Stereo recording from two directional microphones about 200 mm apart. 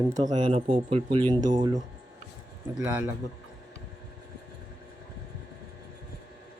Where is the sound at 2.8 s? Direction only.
5° right (ahead or behind).